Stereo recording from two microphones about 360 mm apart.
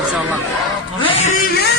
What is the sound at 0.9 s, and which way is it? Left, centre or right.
Music, centre.